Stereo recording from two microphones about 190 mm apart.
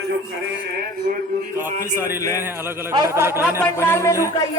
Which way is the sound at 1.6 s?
40° right (ahead or behind).